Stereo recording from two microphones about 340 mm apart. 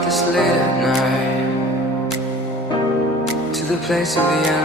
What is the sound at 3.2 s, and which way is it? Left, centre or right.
Music, centre.